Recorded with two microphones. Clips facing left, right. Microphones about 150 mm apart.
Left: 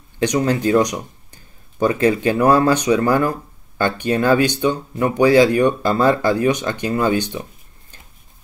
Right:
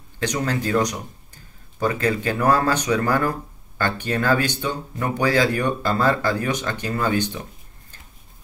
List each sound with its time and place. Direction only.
0.2 s speech: 20° left (ahead or behind)